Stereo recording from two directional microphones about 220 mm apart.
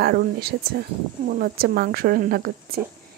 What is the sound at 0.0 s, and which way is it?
Speech, 45° right (ahead or behind).